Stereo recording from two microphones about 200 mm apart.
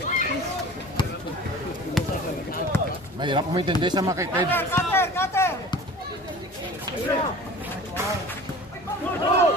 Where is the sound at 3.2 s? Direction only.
25° right (ahead or behind).